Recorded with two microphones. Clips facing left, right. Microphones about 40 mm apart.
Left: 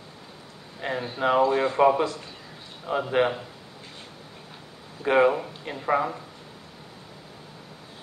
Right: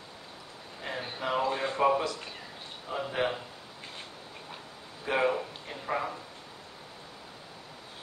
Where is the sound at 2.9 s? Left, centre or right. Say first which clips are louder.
Left 8 dB; left.